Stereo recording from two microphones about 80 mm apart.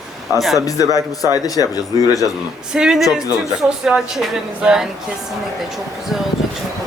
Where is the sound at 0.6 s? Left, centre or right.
Left.